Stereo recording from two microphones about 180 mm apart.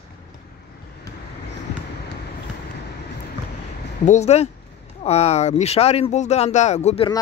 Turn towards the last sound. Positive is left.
turn(degrees=35)  # may be behind; listen again after turning